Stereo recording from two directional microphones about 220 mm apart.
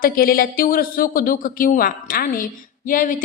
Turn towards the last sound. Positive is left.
turn(degrees=35)  # may be behind; listen again after turning